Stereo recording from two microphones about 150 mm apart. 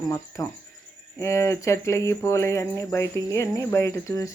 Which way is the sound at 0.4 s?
25° left (ahead or behind).